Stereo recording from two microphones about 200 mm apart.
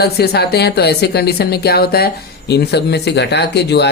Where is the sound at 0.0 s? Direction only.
55° left (ahead or behind).